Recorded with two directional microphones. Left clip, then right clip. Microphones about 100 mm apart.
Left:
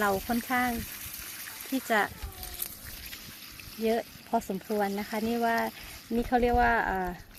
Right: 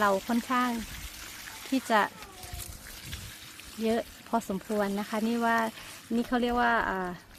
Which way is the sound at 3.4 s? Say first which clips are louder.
Left 2 dB; 20° left (ahead or behind).